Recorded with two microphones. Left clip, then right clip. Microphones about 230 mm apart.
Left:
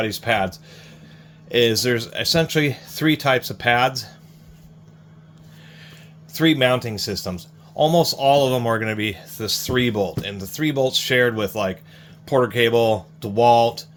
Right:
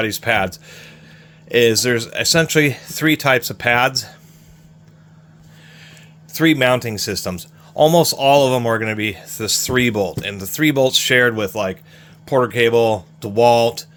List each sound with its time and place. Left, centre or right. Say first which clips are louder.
0.0 s speech: right 3 dB; right
6.3 s speech: right 3 dB; right